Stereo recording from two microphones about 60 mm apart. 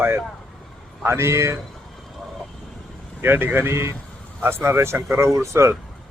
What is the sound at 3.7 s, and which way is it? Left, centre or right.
Speech, right.